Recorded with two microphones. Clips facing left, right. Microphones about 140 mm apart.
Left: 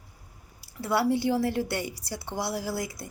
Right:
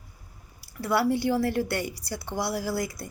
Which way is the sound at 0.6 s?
25° left (ahead or behind).